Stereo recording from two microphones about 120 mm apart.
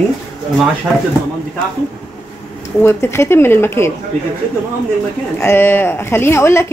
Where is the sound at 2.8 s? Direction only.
20° left (ahead or behind).